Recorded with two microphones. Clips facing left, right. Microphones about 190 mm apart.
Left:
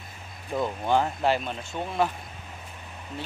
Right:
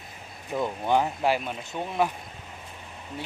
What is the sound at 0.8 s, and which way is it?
Speech, 10° right (ahead or behind).